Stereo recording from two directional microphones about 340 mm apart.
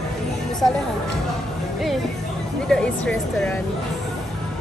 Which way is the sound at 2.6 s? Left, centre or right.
Centre.